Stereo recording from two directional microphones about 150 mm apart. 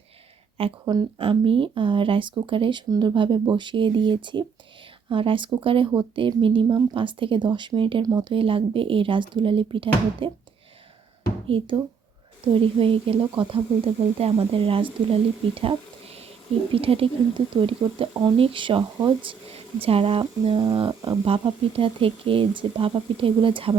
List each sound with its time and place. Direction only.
0.6 s speech: 40° right (ahead or behind)
11.4 s speech: 35° right (ahead or behind)
16.7 s speech: 40° right (ahead or behind)